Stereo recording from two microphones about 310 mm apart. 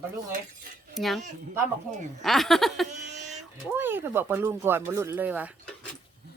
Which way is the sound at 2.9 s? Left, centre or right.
Right.